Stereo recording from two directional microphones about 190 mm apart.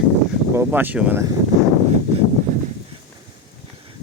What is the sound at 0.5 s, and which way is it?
Speech, 10° right (ahead or behind).